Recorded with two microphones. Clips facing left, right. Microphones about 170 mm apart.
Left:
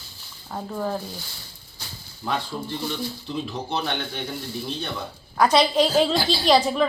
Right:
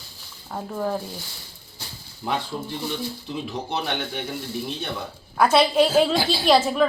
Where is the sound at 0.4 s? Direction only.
5° right (ahead or behind).